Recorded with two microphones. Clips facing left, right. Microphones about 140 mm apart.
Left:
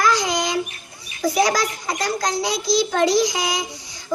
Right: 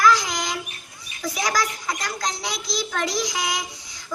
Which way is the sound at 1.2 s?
25° left (ahead or behind).